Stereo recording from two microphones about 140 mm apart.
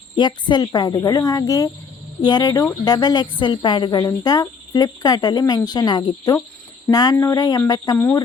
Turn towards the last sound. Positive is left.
turn(degrees=25)  # may be behind; listen again after turning